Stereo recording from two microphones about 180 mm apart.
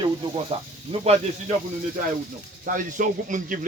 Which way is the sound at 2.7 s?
50° right (ahead or behind).